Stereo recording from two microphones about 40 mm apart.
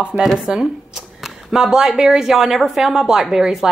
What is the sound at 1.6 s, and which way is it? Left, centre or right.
Speech, centre.